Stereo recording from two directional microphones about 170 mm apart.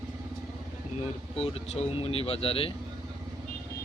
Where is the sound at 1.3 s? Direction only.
35° left (ahead or behind).